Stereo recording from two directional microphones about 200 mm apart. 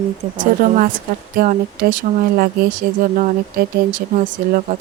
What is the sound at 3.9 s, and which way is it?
Speech, 40° right (ahead or behind).